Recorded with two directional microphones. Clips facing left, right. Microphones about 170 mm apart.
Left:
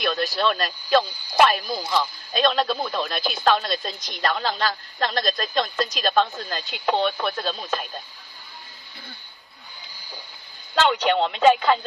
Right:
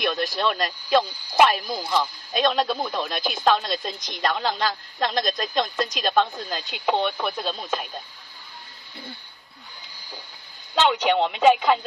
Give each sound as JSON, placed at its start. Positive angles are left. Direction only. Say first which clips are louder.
{"t": 0.4, "sound": "a woman's voice", "louder": "left 1 dB", "side_deg": -20}
{"t": 1.8, "sound": "speech", "louder": "right 1 dB", "side_deg": 5}
{"t": 2.3, "sound": "a man's voice", "louder": "even", "side_deg": -15}
{"t": 6.5, "sound": "speech", "louder": "right 1 dB", "side_deg": 0}
{"t": 10.7, "sound": "speech", "louder": "even", "side_deg": -5}